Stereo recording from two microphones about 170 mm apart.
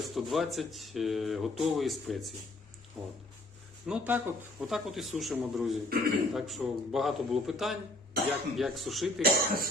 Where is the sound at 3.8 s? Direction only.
5° right (ahead or behind).